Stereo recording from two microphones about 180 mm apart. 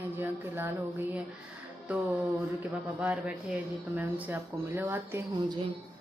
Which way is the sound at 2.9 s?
5° right (ahead or behind).